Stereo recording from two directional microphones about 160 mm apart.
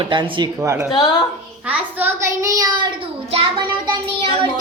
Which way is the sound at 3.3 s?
35° right (ahead or behind).